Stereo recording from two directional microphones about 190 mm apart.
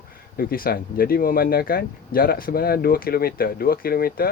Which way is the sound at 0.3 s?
50° left (ahead or behind).